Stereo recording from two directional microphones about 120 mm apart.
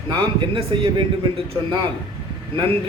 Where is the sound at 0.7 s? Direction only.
45° right (ahead or behind).